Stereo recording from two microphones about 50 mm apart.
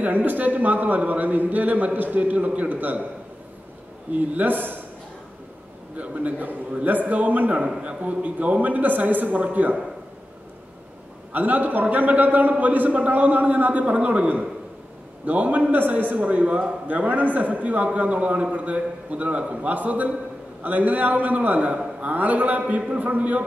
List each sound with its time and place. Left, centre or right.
0.0 s a man's voice: right
4.1 s a man's voice: right
5.9 s a man's voice: right
11.3 s a man's voice: right